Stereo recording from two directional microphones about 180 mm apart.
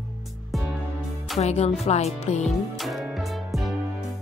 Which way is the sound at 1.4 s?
35° left (ahead or behind).